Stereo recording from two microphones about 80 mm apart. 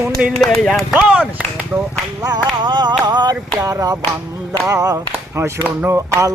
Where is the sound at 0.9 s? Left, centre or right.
Centre.